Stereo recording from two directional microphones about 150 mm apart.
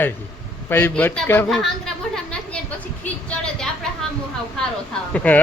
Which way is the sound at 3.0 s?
10° left (ahead or behind).